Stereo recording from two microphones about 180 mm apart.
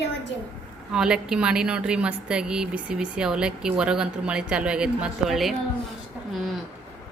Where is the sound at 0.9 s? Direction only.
5° right (ahead or behind).